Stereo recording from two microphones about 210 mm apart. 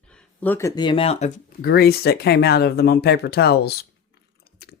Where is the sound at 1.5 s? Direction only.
45° left (ahead or behind).